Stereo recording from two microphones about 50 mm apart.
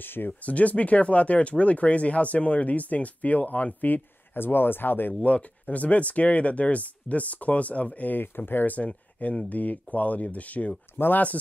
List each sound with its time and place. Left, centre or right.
0.0 s speech: left
0.4 s speech: left
5.2 s speech: left
8.2 s speech: left
8.7 s speech: left